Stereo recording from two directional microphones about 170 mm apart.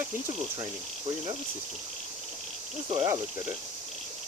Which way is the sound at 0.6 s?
25° right (ahead or behind).